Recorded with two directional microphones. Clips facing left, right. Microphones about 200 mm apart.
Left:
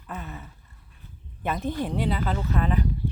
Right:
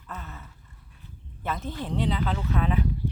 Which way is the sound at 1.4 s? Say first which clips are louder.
Left 5 dB; 15° left (ahead or behind).